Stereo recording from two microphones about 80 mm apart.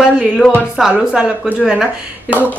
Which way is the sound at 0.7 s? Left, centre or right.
Centre.